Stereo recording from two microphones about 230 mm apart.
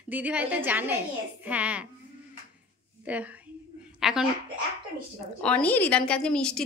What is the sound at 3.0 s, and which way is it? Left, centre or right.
A woman's voice, centre.